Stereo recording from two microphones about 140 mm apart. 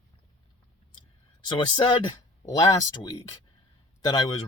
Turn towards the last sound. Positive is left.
turn(degrees=30)  # may be behind; listen again after turning